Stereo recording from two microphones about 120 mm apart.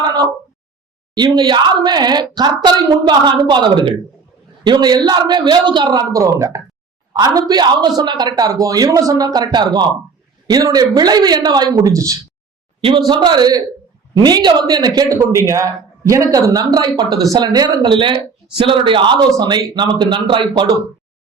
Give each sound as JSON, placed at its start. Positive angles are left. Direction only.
{"t": 0.0, "sound": "a sound", "side_deg": -35}
{"t": 1.1, "sound": "a man's voice", "side_deg": -35}
{"t": 12.8, "sound": "a man's voice", "side_deg": -40}